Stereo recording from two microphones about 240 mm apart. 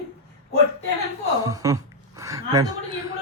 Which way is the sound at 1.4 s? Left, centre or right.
Centre.